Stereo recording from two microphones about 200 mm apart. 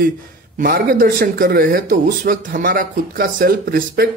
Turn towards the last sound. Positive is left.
turn(degrees=-45)  # may be behind; listen again after turning